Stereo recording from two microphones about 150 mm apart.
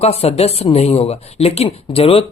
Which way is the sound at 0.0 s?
45° left (ahead or behind).